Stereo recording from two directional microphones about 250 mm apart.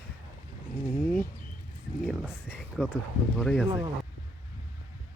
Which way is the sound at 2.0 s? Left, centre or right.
Centre.